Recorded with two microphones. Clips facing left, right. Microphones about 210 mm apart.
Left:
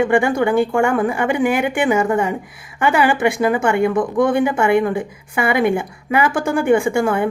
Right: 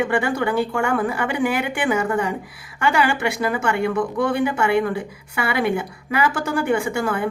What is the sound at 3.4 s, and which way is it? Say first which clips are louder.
Speech: left 5 dB; 25° left (ahead or behind).